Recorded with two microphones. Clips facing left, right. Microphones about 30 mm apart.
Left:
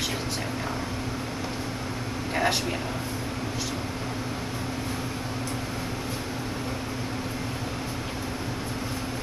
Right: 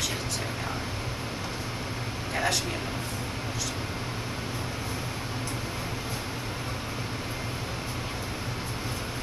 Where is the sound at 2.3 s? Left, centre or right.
Centre.